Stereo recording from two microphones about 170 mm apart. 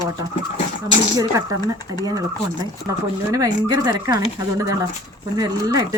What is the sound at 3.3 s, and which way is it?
Speech, 20° right (ahead or behind).